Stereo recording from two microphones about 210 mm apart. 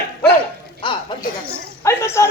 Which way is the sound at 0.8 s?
25° left (ahead or behind).